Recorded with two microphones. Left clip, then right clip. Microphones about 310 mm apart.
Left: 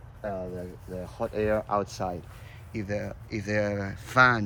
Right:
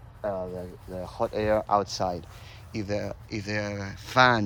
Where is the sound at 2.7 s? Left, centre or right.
Centre.